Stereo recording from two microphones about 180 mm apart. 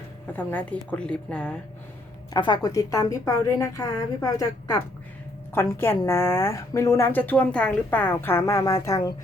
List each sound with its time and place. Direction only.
0.3 s a woman's voice: 10° left (ahead or behind)
2.3 s a woman's voice: 25° left (ahead or behind)